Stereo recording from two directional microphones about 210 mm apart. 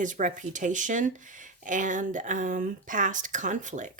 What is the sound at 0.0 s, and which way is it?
Speech, 35° right (ahead or behind).